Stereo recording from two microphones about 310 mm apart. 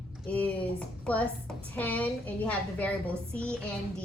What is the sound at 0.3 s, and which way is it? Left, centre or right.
A woman's voice, centre.